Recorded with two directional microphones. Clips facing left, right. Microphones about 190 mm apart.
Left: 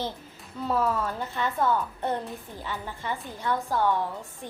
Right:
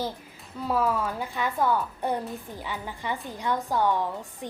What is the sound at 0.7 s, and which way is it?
A woman's voice, 10° right (ahead or behind).